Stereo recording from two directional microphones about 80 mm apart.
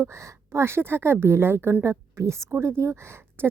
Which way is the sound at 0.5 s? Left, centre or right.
Right.